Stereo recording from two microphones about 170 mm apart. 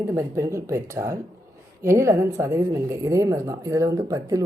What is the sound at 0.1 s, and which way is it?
A woman's voice, 15° right (ahead or behind).